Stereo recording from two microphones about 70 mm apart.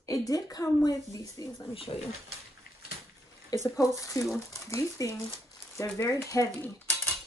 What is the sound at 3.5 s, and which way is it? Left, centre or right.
Speech, left.